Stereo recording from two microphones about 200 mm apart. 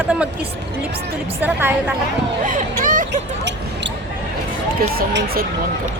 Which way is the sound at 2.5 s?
40° right (ahead or behind).